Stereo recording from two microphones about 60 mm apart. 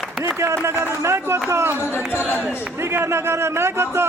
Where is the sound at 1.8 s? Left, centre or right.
Left.